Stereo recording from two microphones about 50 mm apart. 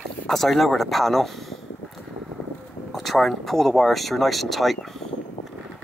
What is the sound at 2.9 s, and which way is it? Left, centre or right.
Speech, centre.